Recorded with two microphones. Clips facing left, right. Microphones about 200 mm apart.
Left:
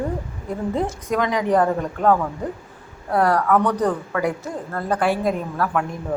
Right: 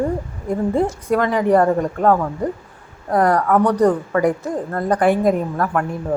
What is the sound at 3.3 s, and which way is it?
Speech, 10° right (ahead or behind).